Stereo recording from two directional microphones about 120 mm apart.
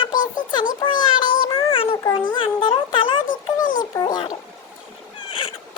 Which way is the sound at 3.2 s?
90° left.